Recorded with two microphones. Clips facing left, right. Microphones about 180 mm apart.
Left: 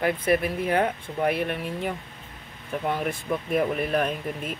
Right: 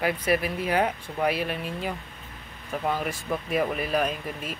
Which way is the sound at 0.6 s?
50° left (ahead or behind).